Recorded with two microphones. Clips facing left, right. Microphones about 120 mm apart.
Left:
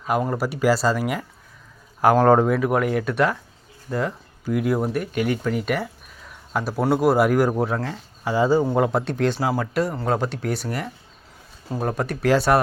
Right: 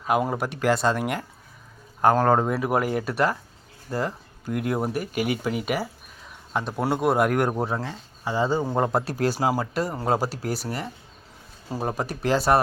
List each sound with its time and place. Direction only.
0.1 s speech: 5° right (ahead or behind)
4.5 s speech: centre (ahead or behind)
7.7 s speech: 20° right (ahead or behind)
8.5 s speech: 5° left (ahead or behind)
9.9 s speech: 10° right (ahead or behind)